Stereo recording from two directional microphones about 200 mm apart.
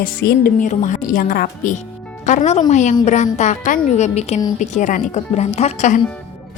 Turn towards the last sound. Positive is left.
turn(degrees=35)  # may be behind; listen again after turning